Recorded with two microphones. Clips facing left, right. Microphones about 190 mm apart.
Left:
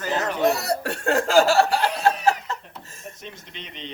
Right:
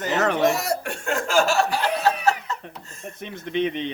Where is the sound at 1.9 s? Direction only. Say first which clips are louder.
Even; 60° right (ahead or behind).